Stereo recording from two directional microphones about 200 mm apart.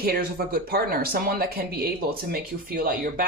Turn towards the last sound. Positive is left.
turn(degrees=-45)  # may be behind; listen again after turning